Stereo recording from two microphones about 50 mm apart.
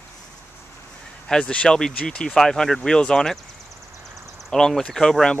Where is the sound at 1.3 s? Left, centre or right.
Centre.